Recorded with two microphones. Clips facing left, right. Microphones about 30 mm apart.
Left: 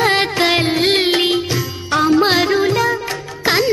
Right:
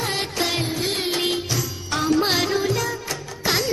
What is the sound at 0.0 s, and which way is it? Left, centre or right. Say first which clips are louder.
Music: left 10 dB; left.